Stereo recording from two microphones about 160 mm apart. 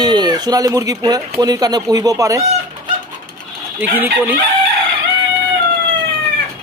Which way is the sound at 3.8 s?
10° right (ahead or behind).